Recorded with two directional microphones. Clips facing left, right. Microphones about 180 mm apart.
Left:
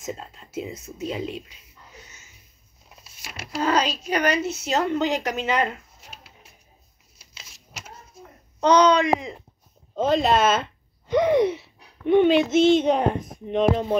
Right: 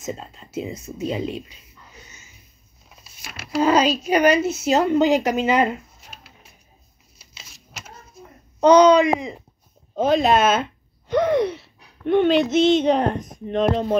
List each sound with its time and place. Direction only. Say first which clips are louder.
0.0 s speech: right 2 dB; 5° left (ahead or behind)
3.6 s speech: right 5 dB; 5° right (ahead or behind)
8.5 s speech: right 5 dB; 5° right (ahead or behind)
11.1 s a woman's voice: even; 15° left (ahead or behind)
11.5 s gasp: left 2 dB; 5° left (ahead or behind)
12.8 s a woman's voice: right 2 dB; 5° left (ahead or behind)